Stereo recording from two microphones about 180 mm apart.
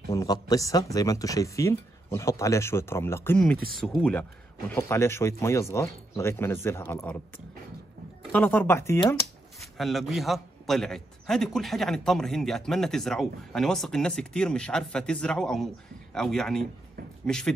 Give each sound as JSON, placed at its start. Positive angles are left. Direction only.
{"t": 0.1, "sound": "speech", "side_deg": 20}
{"t": 8.3, "sound": "speech", "side_deg": 10}
{"t": 9.6, "sound": "a man's voice", "side_deg": 0}